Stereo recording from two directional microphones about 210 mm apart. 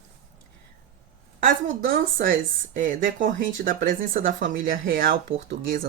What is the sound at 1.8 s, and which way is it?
Speech, 40° right (ahead or behind).